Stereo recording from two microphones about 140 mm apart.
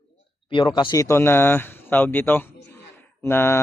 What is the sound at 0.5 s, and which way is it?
Speech, 35° left (ahead or behind).